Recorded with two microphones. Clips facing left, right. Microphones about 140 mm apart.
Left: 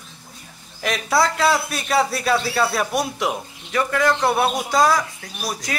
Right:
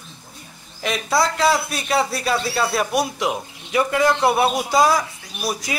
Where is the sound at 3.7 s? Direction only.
15° right (ahead or behind).